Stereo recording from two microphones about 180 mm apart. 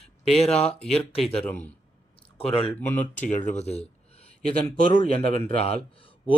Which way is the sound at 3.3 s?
45° left (ahead or behind).